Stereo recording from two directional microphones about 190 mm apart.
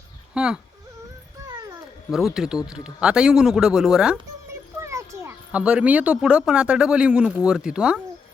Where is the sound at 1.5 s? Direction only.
20° right (ahead or behind).